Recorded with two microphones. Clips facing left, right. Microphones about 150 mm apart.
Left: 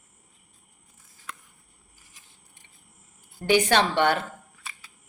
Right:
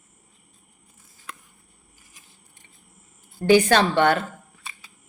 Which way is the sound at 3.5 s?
20° left (ahead or behind).